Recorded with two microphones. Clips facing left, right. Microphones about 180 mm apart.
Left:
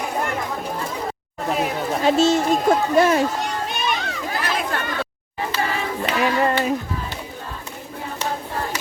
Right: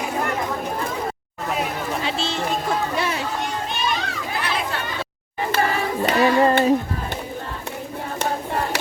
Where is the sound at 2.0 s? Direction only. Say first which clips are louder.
Left 13 dB; 45° left (ahead or behind).